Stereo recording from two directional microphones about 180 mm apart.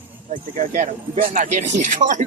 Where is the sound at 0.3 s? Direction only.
45° right (ahead or behind).